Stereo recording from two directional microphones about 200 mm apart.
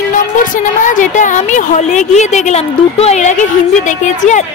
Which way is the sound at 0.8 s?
40° left (ahead or behind).